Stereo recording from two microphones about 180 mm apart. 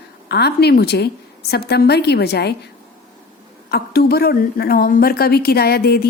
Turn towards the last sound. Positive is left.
turn(degrees=60)  # may be behind; listen again after turning